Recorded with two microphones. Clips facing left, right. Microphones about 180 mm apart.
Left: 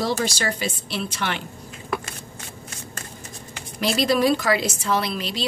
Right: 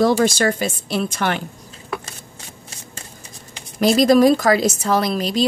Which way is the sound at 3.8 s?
45° right (ahead or behind).